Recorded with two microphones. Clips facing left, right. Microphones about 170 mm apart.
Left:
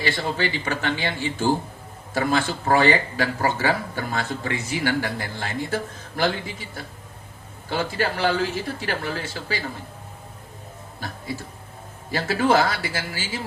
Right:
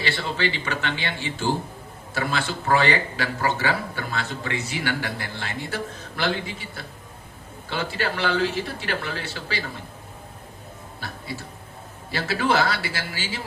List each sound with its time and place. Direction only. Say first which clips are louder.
0.0 s speech: left 1 dB; 45° left (ahead or behind)
7.7 s speech: left 3 dB; 40° left (ahead or behind)
12.1 s speech: left 3 dB; 45° left (ahead or behind)